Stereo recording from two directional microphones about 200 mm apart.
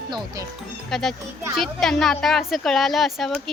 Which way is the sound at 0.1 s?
20° right (ahead or behind).